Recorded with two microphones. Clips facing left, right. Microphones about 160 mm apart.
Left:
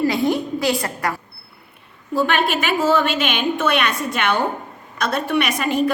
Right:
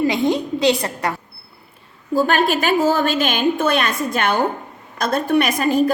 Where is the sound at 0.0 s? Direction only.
20° right (ahead or behind).